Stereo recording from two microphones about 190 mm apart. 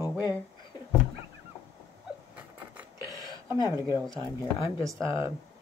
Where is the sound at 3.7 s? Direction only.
15° right (ahead or behind).